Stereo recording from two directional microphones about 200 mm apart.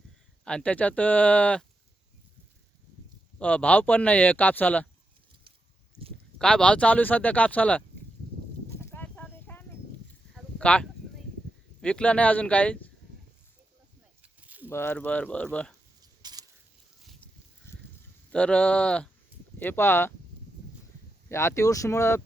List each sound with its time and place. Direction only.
0.4 s speech: 5° left (ahead or behind)
3.3 s speech: 5° left (ahead or behind)
6.4 s speech: 5° left (ahead or behind)
8.7 s a sound: 10° left (ahead or behind)
11.8 s speech: 5° left (ahead or behind)
14.2 s snake: 10° right (ahead or behind)
14.7 s speech: 10° left (ahead or behind)
16.0 s a sound: 20° right (ahead or behind)
17.0 s a sound: centre (ahead or behind)
17.7 s a sound: 10° left (ahead or behind)
18.3 s speech: 5° left (ahead or behind)
21.2 s speech: 15° left (ahead or behind)